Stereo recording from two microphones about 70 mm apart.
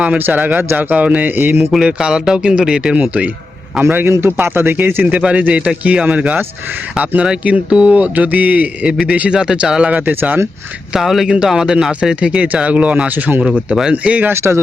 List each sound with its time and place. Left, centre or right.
0.3 s speech: right
1.7 s speech: centre
3.8 s speech: right
5.0 s speech: centre
9.9 s speech: right
10.9 s speech: centre
13.9 s speech: right
14.3 s speech: right